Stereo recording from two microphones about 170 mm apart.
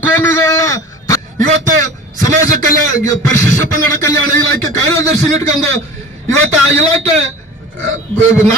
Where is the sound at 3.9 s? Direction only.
15° left (ahead or behind).